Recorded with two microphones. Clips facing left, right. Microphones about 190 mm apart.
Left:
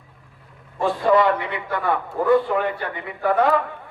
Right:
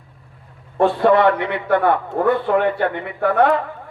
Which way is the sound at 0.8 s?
60° right (ahead or behind).